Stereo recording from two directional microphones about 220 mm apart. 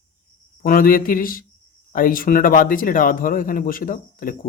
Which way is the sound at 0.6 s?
40° left (ahead or behind).